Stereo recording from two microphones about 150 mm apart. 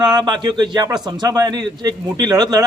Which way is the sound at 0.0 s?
30° right (ahead or behind).